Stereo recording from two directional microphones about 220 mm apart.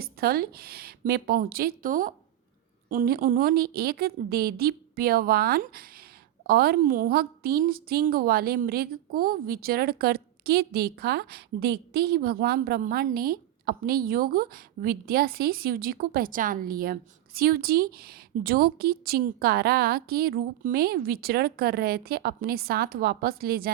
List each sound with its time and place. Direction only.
0.0 s a woman's voice: 45° right (ahead or behind)